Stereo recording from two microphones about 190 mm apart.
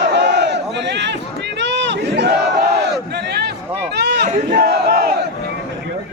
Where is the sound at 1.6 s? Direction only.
70° right (ahead or behind).